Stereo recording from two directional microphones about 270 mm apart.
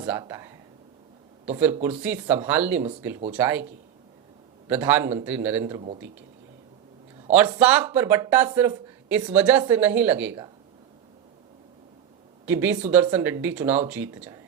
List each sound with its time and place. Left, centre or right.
0.0 s speech: centre
4.7 s speech: centre
5.6 s a man's voice: right
7.3 s speech: centre
12.5 s speech: centre